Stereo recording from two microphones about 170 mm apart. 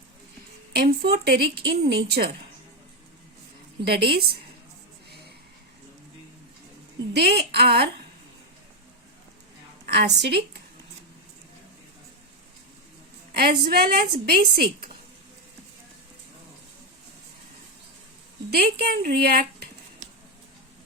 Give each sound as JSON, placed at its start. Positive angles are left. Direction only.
{"t": 0.7, "sound": "a woman's voice", "side_deg": -65}
{"t": 3.8, "sound": "a woman's voice", "side_deg": -70}
{"t": 7.1, "sound": "a woman's voice", "side_deg": -80}
{"t": 9.9, "sound": "a woman's voice", "side_deg": -85}
{"t": 13.3, "sound": "a woman's voice", "side_deg": -65}
{"t": 18.5, "sound": "a woman's voice", "side_deg": -65}